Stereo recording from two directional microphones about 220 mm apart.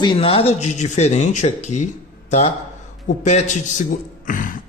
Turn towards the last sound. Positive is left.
turn(degrees=35)  # may be behind; listen again after turning